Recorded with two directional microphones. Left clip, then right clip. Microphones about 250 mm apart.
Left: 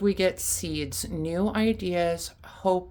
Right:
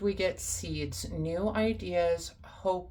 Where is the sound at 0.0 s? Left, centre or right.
Left.